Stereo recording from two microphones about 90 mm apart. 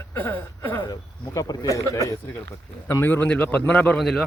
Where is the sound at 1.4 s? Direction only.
40° left (ahead or behind).